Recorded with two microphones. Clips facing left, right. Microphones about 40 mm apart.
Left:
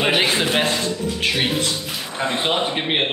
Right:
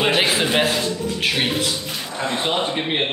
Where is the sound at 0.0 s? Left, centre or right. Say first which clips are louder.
Even; centre.